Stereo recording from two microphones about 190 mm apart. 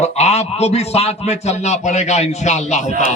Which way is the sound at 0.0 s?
35° left (ahead or behind).